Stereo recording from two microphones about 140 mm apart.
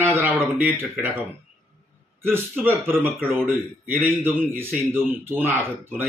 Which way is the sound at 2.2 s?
15° right (ahead or behind).